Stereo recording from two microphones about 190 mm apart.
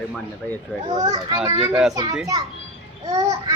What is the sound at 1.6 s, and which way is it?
Speech, 5° right (ahead or behind).